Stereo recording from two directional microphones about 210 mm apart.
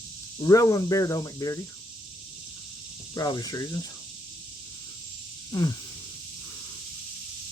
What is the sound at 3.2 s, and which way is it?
Speech, 15° left (ahead or behind).